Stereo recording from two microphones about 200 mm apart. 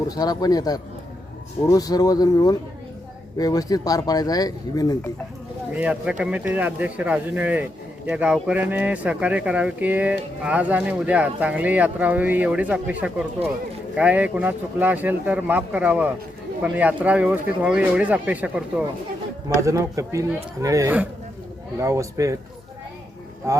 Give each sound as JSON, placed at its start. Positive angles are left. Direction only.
{"t": 0.1, "sound": "speech", "side_deg": 20}
{"t": 5.7, "sound": "speech", "side_deg": -5}
{"t": 19.5, "sound": "speech", "side_deg": -15}
{"t": 23.4, "sound": "speech", "side_deg": -15}